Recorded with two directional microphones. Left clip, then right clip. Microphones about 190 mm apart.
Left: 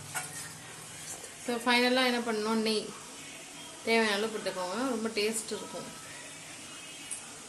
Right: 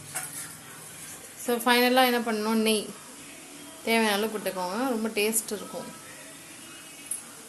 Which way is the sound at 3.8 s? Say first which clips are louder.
Right 3 dB; 20° right (ahead or behind).